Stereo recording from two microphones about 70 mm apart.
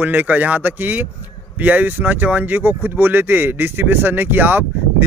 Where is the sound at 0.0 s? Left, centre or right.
Right.